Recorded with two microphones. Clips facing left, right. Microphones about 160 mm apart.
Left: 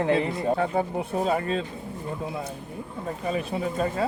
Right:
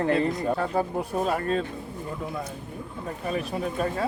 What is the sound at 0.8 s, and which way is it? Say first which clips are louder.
Speech: even; 20° left (ahead or behind).